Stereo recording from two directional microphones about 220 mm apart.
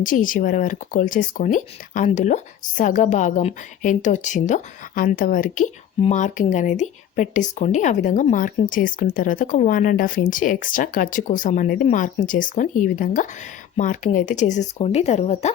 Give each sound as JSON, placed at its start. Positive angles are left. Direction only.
{"t": 0.0, "sound": "speech", "side_deg": 40}